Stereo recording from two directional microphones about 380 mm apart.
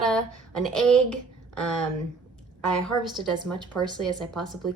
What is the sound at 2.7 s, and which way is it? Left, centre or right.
Speech, centre.